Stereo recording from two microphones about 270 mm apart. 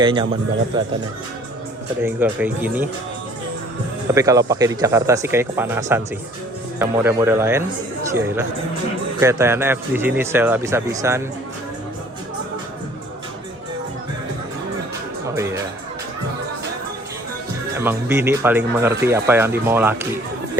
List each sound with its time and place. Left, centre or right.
0.0 s speech: centre
2.0 s speech: centre
4.1 s speech: centre
9.2 s speech: centre
15.4 s music: centre
17.7 s speech: centre